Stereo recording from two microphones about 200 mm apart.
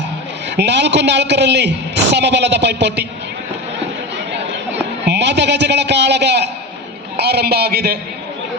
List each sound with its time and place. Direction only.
0.5 s a man's voice: 60° right (ahead or behind)
5.0 s a man's voice: 60° right (ahead or behind)